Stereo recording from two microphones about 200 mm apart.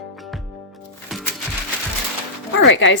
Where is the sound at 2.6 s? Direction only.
65° left (ahead or behind).